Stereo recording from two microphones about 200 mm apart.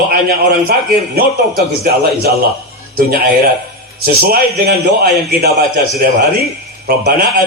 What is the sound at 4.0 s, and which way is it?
A man's voice, 50° right (ahead or behind).